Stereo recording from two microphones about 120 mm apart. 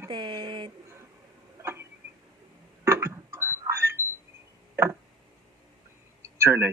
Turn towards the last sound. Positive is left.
turn(degrees=-20)  # may be behind; listen again after turning